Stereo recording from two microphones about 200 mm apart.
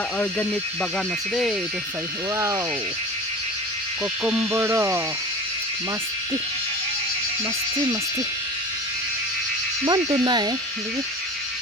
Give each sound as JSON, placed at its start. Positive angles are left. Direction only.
{"t": 0.2, "sound": "speech", "side_deg": 10}
{"t": 4.2, "sound": "speech", "side_deg": -5}
{"t": 9.8, "sound": "frog", "side_deg": -20}